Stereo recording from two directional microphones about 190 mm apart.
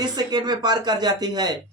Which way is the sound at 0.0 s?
20° right (ahead or behind).